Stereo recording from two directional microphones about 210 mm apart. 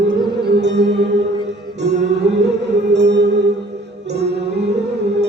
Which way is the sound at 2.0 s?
55° right (ahead or behind).